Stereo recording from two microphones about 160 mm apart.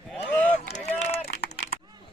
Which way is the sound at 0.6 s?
45° left (ahead or behind).